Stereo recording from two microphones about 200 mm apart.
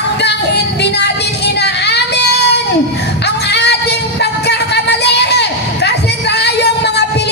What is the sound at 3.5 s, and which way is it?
Music, 55° left (ahead or behind).